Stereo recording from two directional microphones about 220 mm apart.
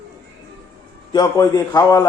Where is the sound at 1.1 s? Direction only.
15° left (ahead or behind).